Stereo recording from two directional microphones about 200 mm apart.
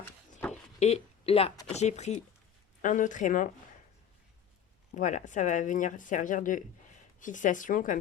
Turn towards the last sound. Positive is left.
turn(degrees=40)  # may be behind; listen again after turning